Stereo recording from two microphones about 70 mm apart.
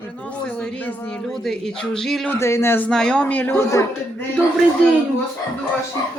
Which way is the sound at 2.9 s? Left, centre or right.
Centre.